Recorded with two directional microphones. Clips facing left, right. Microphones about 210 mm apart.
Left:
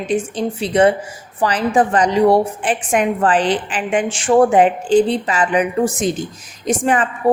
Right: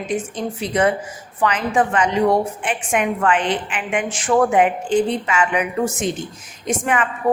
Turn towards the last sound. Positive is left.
turn(degrees=35)  # may be behind; listen again after turning